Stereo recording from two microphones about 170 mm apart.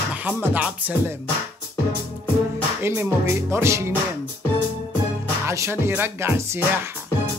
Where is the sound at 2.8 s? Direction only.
15° right (ahead or behind).